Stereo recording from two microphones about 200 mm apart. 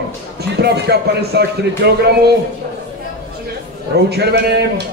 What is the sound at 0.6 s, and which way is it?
Speech, 55° right (ahead or behind).